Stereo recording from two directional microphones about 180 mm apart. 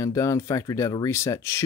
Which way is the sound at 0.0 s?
15° left (ahead or behind).